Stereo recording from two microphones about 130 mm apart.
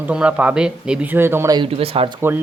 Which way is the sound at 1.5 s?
40° right (ahead or behind).